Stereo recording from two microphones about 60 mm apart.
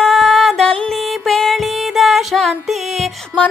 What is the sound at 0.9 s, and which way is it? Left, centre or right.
Music, centre.